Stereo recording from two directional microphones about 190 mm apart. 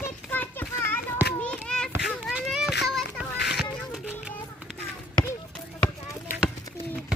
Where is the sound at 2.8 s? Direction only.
Centre (ahead or behind).